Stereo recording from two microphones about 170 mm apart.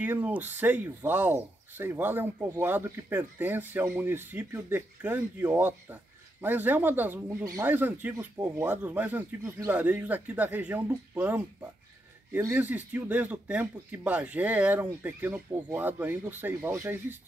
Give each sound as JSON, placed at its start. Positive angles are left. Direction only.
{"t": 0.0, "sound": "speech", "side_deg": -10}